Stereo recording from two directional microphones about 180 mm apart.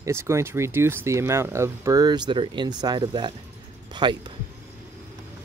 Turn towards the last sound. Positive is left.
turn(degrees=-25)  # may be behind; listen again after turning